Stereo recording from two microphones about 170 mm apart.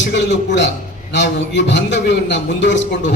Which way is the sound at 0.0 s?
90° left.